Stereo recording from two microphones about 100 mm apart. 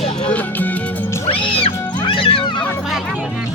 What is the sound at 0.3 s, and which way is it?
Music, 15° left (ahead or behind).